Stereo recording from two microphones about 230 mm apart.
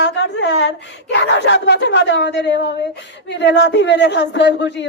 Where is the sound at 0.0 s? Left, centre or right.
Left.